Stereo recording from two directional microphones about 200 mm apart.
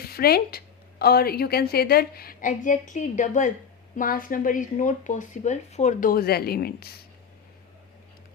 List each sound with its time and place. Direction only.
0.0 s a woman's voice: 50° left (ahead or behind)